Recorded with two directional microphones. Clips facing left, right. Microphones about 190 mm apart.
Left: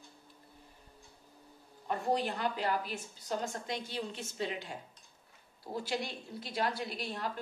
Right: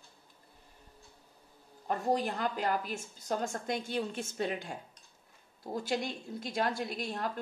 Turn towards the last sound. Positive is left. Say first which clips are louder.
# right 3 dB
turn(degrees=-45)  # may be behind; listen again after turning